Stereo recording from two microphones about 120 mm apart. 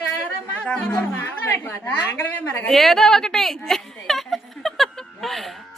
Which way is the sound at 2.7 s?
Centre (ahead or behind).